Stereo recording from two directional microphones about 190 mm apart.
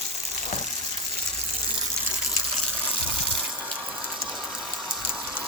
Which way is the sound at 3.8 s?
5° right (ahead or behind).